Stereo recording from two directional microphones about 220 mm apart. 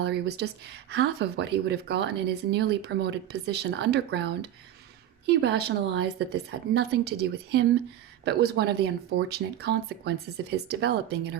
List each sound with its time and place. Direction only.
0.0 s speech: 50° right (ahead or behind)